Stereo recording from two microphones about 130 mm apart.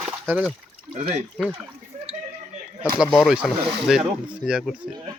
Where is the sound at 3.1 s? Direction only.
5° right (ahead or behind).